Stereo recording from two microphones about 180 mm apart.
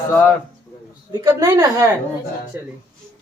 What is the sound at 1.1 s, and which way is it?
A woman's voice, 15° right (ahead or behind).